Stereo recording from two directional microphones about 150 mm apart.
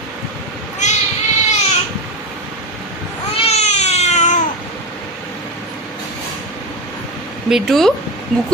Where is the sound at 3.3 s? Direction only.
45° left (ahead or behind).